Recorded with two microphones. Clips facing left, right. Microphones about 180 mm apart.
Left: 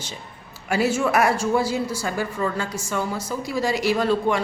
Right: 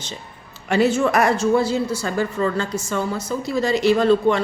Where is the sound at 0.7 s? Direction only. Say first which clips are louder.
Right 3 dB; 5° left (ahead or behind).